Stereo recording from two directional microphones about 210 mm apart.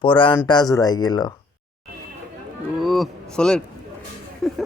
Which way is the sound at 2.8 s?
Centre (ahead or behind).